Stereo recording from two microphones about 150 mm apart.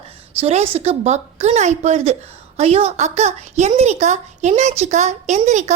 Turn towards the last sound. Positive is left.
turn(degrees=-50)  # may be behind; listen again after turning